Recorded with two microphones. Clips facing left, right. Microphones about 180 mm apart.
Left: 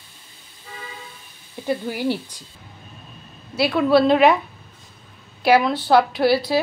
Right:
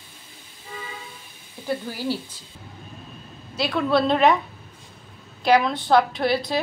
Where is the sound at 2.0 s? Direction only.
15° left (ahead or behind).